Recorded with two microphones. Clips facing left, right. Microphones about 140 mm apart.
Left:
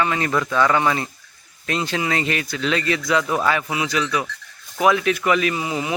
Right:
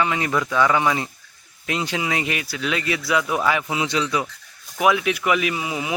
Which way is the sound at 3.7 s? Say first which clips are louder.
Even; 25° right (ahead or behind).